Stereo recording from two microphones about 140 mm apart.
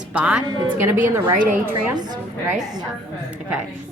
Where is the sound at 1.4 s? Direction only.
70° right (ahead or behind).